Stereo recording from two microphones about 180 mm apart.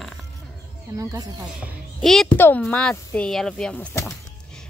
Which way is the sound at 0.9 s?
20° right (ahead or behind).